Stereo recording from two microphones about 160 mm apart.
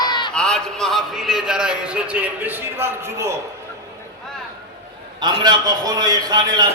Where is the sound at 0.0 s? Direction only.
25° left (ahead or behind).